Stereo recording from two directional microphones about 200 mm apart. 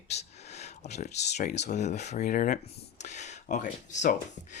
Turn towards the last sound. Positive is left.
turn(degrees=35)  # may be behind; listen again after turning